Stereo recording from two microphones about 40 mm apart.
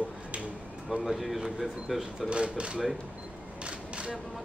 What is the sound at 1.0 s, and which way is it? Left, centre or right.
Speech, centre.